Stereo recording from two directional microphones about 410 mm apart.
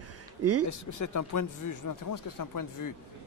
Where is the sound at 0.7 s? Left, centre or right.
Left.